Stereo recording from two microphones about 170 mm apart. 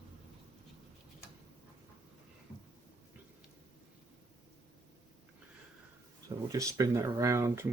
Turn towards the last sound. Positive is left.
turn(degrees=-15)  # may be behind; listen again after turning